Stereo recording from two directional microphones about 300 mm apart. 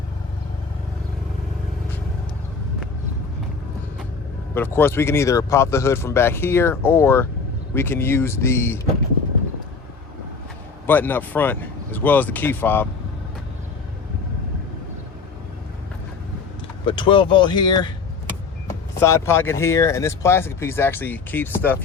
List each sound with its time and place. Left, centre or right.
4.5 s speech: centre
10.8 s speech: centre
16.8 s speech: centre
18.9 s speech: centre